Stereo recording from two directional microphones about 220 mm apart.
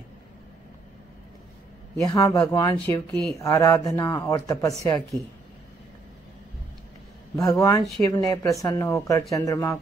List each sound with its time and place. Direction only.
2.0 s speech: 15° left (ahead or behind)
7.4 s speech: 15° left (ahead or behind)